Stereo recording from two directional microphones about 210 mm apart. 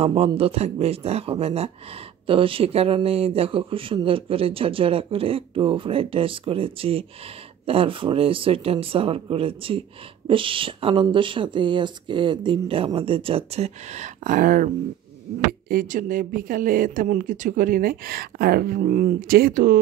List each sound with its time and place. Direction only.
0.0 s speech: 30° right (ahead or behind)
15.7 s speech: 40° right (ahead or behind)